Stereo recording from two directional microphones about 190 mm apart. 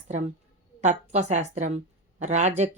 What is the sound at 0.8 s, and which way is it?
A woman's voice, 35° right (ahead or behind).